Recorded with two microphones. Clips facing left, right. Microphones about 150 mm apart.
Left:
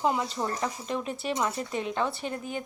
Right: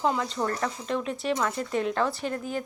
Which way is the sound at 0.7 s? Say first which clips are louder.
Right 2 dB; 5° left (ahead or behind).